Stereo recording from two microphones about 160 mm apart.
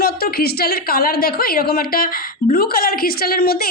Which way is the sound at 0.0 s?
70° left (ahead or behind).